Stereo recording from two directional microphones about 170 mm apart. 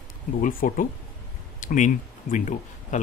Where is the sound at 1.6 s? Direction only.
50° left (ahead or behind).